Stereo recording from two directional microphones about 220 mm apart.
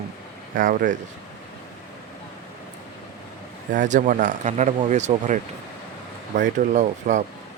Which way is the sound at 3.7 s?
35° right (ahead or behind).